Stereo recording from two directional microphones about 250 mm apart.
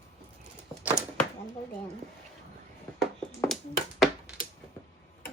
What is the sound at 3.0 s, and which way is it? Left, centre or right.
Finger snapping, centre.